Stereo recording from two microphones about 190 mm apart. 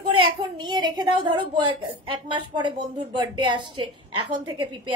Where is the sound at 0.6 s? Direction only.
25° right (ahead or behind).